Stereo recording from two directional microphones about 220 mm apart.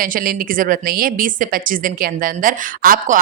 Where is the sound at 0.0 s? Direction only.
40° right (ahead or behind).